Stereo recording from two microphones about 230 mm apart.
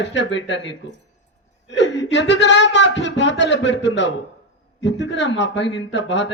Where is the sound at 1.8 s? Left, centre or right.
Left.